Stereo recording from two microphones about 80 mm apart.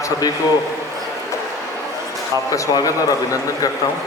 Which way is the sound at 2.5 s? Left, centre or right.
Left.